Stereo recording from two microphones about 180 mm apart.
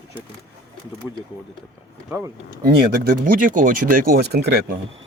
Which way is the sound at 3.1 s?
50° right (ahead or behind).